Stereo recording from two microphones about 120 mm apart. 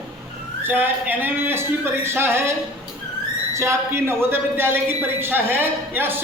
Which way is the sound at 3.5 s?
20° right (ahead or behind).